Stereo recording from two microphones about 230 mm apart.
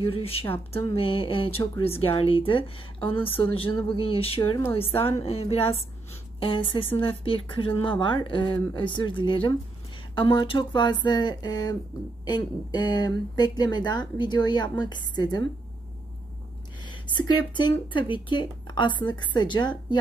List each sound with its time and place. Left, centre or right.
0.0 s speech: left
16.8 s speech: centre